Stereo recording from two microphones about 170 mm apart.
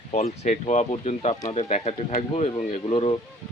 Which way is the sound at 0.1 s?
40° left (ahead or behind).